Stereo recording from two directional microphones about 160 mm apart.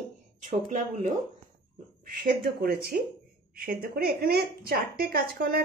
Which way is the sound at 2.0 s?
65° right (ahead or behind).